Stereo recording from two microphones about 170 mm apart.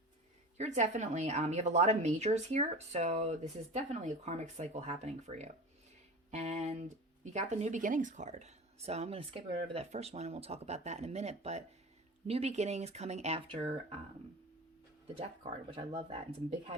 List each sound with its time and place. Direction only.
0.5 s a woman's voice: 40° right (ahead or behind)
15.0 s a woman's voice: 35° right (ahead or behind)